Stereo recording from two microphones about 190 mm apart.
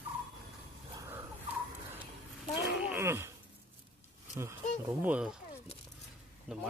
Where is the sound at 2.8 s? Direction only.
15° right (ahead or behind).